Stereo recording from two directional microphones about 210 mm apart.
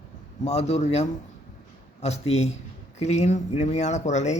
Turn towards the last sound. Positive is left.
turn(degrees=35)  # may be behind; listen again after turning